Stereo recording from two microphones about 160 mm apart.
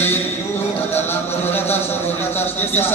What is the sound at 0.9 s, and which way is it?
Speech, 15° left (ahead or behind).